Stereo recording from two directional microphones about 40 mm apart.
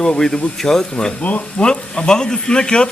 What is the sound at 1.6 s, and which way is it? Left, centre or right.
Speech, left.